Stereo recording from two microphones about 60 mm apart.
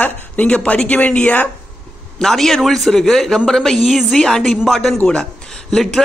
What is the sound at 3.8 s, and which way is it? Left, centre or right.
Speech, centre.